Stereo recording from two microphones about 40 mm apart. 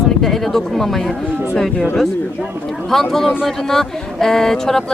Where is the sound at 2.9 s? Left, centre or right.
Centre.